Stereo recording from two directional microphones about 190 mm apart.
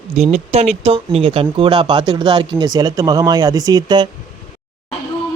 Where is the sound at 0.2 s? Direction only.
35° right (ahead or behind).